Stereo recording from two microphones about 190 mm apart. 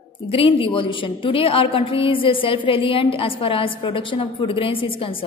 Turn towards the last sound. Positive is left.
turn(degrees=30)  # may be behind; listen again after turning